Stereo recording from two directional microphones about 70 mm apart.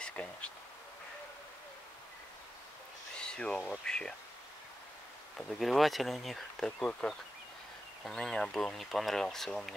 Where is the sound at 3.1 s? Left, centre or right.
Centre.